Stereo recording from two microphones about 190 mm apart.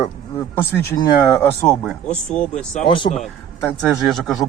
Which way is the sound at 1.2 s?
15° left (ahead or behind).